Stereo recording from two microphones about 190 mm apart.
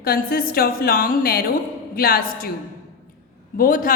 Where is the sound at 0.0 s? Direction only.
50° left (ahead or behind).